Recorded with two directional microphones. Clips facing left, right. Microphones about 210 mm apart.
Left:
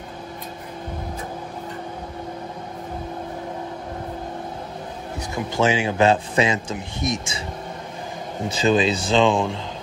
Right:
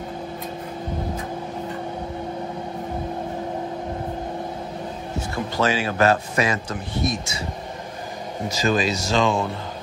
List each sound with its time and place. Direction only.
5.3 s speech: 20° left (ahead or behind)
8.6 s speech: 25° left (ahead or behind)